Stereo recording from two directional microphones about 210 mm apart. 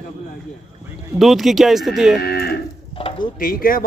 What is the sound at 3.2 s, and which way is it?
Speech, 40° left (ahead or behind).